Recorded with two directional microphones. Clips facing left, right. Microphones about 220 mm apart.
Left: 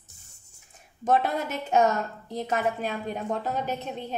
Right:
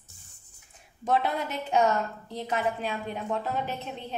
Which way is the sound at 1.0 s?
45° left (ahead or behind).